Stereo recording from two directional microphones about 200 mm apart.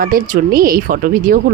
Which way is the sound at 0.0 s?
45° right (ahead or behind).